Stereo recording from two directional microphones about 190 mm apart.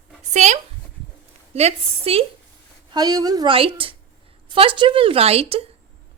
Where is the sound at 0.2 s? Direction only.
40° right (ahead or behind).